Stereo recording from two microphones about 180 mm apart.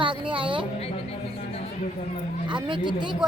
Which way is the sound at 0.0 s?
25° right (ahead or behind).